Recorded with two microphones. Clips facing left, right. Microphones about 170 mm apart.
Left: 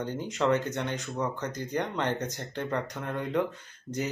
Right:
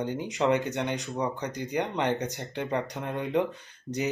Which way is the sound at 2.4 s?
15° right (ahead or behind).